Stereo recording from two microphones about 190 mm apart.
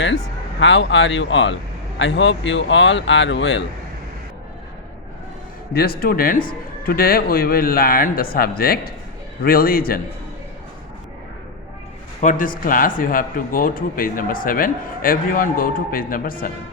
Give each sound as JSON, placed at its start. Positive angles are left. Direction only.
{"t": 0.6, "sound": "speech", "side_deg": 75}
{"t": 5.7, "sound": "a man's voice", "side_deg": 50}
{"t": 12.2, "sound": "a man's voice", "side_deg": 45}